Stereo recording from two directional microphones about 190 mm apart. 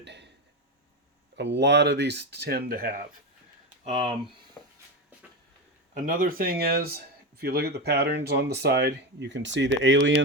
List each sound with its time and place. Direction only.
0.0 s a sound: 65° right (ahead or behind)
1.4 s speech: 65° right (ahead or behind)
3.8 s speech: 30° right (ahead or behind)
6.1 s speech: 45° right (ahead or behind); by 10.2 s 75° right (ahead or behind)